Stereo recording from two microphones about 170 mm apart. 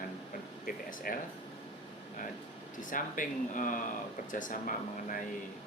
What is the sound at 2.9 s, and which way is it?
Speech, 50° left (ahead or behind).